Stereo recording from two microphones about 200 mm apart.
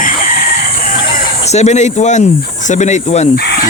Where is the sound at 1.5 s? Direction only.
35° left (ahead or behind).